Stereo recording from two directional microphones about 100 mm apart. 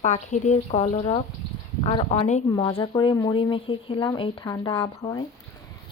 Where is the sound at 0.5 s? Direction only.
90° left.